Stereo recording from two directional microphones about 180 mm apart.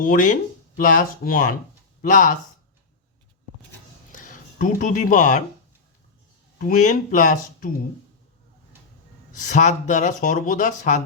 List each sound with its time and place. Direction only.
0.0 s speech: 50° left (ahead or behind)
4.1 s a sound: 45° left (ahead or behind)
6.6 s speech: 45° left (ahead or behind)
9.3 s speech: 45° left (ahead or behind)